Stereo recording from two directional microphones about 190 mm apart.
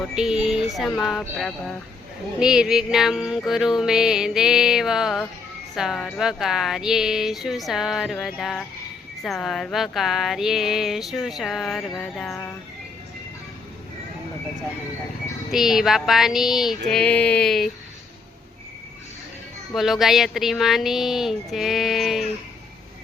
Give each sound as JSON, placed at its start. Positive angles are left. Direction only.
{"t": 0.0, "sound": "speech", "side_deg": -5}
{"t": 15.5, "sound": "speech", "side_deg": 0}
{"t": 19.7, "sound": "speech", "side_deg": 0}